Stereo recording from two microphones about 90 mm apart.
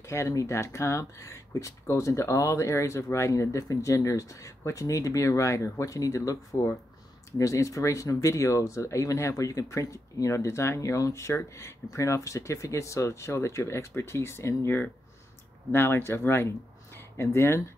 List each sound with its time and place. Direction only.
0.0 s speech: 30° left (ahead or behind)